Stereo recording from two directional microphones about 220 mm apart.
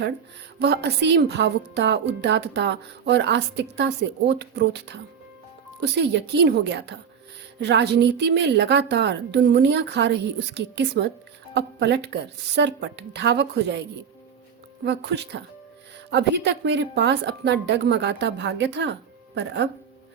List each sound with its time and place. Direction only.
0.6 s a woman's voice: 50° right (ahead or behind)
14.8 s a woman's voice: 50° right (ahead or behind)